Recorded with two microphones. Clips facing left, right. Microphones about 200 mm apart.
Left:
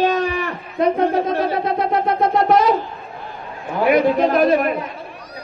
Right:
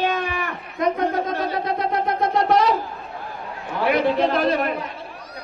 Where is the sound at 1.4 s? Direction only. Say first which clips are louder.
Left 4 dB; 25° left (ahead or behind).